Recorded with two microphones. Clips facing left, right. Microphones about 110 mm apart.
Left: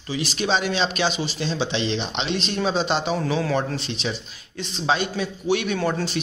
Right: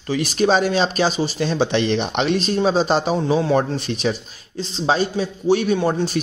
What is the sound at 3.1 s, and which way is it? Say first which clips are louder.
Speech: right 5 dB; 25° right (ahead or behind).